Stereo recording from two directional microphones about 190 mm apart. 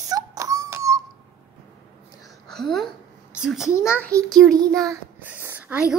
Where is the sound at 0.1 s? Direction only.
20° right (ahead or behind).